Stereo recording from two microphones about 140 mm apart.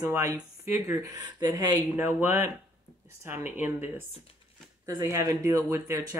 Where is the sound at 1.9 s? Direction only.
15° right (ahead or behind).